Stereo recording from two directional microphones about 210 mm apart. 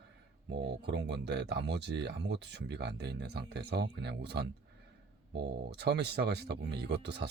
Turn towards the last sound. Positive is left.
turn(degrees=-55)  # may be behind; listen again after turning